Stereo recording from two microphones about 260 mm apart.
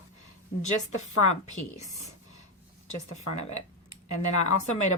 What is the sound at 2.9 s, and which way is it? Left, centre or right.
A woman's voice, left.